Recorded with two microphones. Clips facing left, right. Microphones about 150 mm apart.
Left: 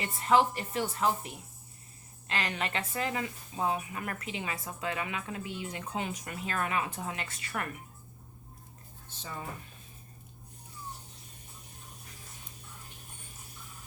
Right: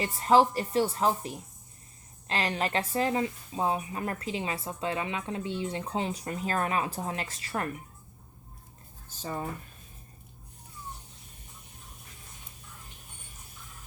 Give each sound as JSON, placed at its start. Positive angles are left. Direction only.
{"t": 0.0, "sound": "a woman's voice", "side_deg": -35}
{"t": 9.0, "sound": "speech", "side_deg": -40}